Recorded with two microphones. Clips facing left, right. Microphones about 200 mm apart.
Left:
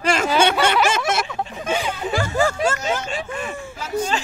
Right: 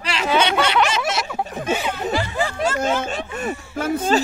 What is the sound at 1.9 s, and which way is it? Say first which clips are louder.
Speech: right 1 dB; 55° right (ahead or behind).